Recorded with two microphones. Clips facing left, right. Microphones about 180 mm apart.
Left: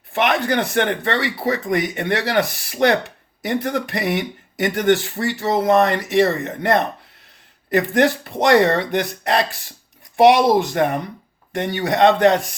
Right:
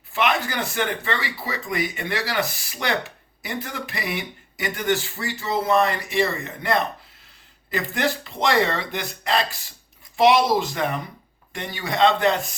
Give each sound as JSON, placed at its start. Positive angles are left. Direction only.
{"t": 0.1, "sound": "speech", "side_deg": 60}
{"t": 11.5, "sound": "speech", "side_deg": 65}